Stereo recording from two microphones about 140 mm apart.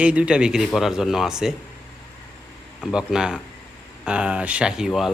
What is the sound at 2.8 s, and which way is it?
Speech, 5° right (ahead or behind).